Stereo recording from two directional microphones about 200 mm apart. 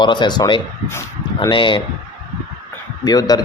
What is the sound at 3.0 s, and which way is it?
Speech, 20° left (ahead or behind).